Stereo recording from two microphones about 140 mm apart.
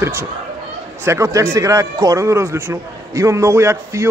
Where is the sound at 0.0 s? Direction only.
20° right (ahead or behind).